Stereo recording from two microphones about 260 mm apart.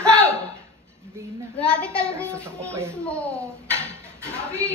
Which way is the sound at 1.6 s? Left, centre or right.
Centre.